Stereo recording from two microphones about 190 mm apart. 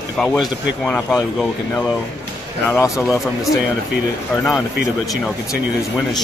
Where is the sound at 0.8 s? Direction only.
5° left (ahead or behind).